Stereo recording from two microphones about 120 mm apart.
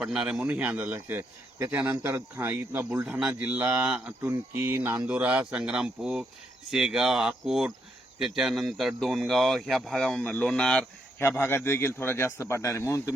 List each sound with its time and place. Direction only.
0.0 s speech: 5° right (ahead or behind)
11.2 s a man's voice: 20° left (ahead or behind)